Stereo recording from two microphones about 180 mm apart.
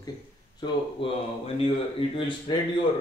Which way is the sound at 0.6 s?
25° left (ahead or behind).